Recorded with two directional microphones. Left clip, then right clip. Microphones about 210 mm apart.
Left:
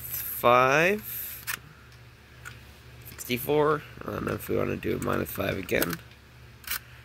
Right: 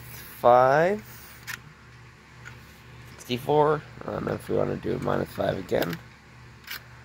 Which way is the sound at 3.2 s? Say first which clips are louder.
Right 3 dB; 10° left (ahead or behind).